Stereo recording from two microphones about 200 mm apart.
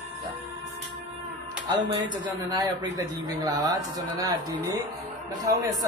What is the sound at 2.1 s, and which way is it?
A man's voice, 20° right (ahead or behind).